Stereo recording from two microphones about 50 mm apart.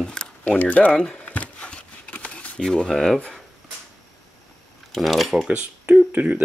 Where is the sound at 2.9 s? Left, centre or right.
Centre.